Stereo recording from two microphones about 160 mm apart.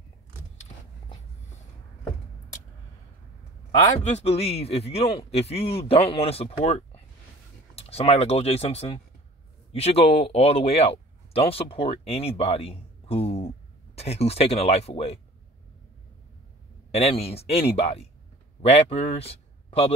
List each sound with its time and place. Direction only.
4.0 s a man's voice: 40° left (ahead or behind)
16.9 s a man's voice: 40° left (ahead or behind)